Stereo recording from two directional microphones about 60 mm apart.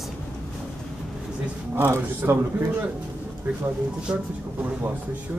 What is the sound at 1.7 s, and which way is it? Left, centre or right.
Speech, right.